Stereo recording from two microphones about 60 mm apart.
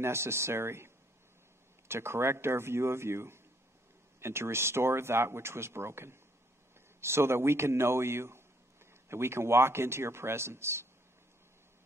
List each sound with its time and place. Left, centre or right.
0.0 s speech: right